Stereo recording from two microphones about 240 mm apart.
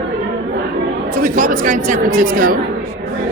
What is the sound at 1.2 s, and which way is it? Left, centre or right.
A woman's voice, right.